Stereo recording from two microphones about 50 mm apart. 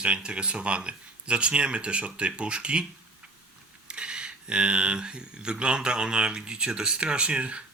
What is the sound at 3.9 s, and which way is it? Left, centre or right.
Speech, centre.